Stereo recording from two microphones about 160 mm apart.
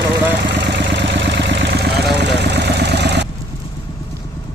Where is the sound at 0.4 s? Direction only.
90° right.